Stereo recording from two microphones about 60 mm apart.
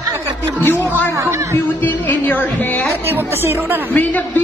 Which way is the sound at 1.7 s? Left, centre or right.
Left.